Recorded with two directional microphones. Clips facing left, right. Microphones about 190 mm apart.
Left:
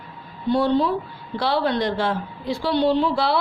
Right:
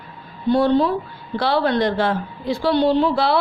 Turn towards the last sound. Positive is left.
turn(degrees=-55)  # may be behind; listen again after turning